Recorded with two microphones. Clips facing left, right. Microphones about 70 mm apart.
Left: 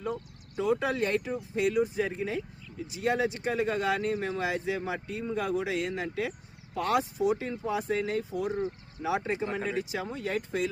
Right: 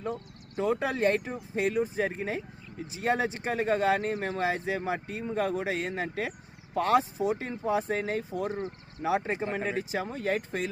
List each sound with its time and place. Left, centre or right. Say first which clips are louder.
0.5 s speech: even; right